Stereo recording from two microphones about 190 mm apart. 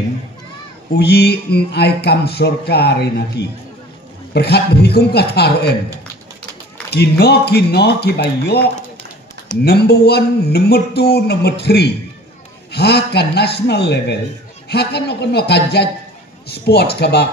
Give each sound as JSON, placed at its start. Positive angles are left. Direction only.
{"t": 0.9, "sound": "speech", "side_deg": 60}
{"t": 6.9, "sound": "speech", "side_deg": 60}
{"t": 9.7, "sound": "speech", "side_deg": 55}